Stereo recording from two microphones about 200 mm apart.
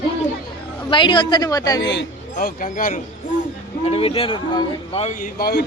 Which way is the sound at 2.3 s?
40° left (ahead or behind).